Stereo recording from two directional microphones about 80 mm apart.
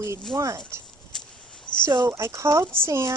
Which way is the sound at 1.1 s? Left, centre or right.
Centre.